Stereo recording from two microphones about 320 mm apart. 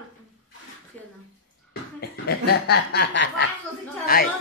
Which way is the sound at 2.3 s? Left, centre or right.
Left.